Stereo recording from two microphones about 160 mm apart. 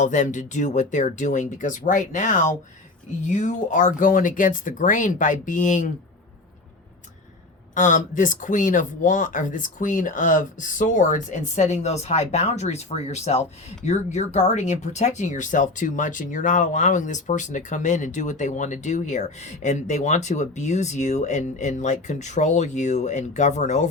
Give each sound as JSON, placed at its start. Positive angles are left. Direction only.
{"t": 0.0, "sound": "speech", "side_deg": 50}
{"t": 7.8, "sound": "speech", "side_deg": 50}